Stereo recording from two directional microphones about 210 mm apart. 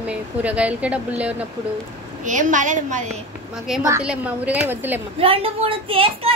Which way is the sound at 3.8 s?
10° right (ahead or behind).